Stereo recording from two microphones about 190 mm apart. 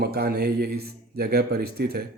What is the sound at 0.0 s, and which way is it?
A man's voice, 55° right (ahead or behind).